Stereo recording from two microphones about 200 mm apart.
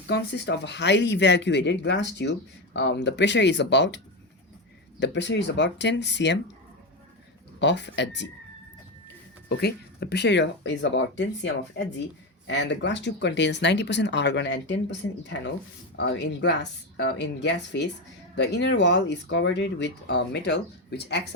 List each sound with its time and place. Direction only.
0.1 s speech: 60° left (ahead or behind)
7.6 s speech: 60° left (ahead or behind)
9.5 s speech: 55° left (ahead or behind)